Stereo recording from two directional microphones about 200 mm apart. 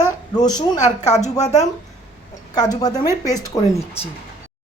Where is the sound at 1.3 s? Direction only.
20° left (ahead or behind).